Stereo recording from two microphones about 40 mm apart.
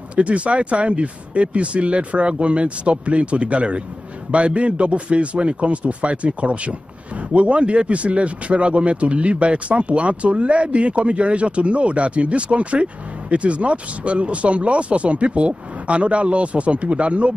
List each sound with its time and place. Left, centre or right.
0.1 s speech: right